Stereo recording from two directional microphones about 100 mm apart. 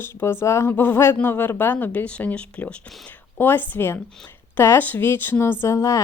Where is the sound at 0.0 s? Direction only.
25° left (ahead or behind).